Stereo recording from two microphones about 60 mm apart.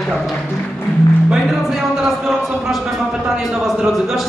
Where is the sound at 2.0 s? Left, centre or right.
Centre.